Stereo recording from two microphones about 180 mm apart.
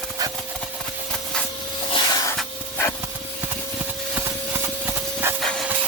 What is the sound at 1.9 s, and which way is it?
Hiss, 25° left (ahead or behind).